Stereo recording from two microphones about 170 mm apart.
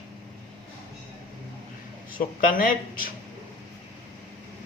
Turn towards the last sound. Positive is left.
turn(degrees=55)  # may be behind; listen again after turning